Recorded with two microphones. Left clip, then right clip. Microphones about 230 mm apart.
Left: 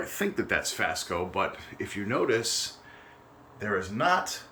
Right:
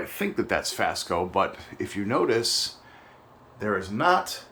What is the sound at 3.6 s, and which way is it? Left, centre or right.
Speech, centre.